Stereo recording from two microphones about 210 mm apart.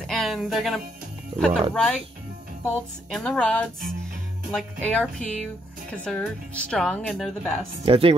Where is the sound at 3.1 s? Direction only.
5° left (ahead or behind).